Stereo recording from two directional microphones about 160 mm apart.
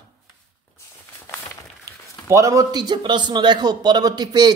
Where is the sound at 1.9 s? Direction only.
20° right (ahead or behind).